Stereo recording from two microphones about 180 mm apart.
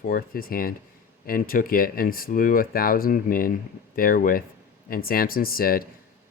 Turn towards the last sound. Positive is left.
turn(degrees=55)  # may be behind; listen again after turning